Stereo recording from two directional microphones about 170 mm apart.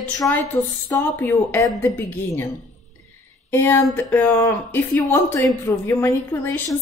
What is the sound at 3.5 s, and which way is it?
Speech, 15° left (ahead or behind).